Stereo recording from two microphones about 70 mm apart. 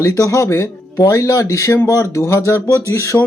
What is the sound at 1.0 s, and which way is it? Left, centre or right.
Speech, left.